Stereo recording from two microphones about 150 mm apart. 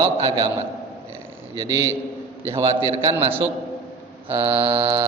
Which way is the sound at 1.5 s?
20° right (ahead or behind).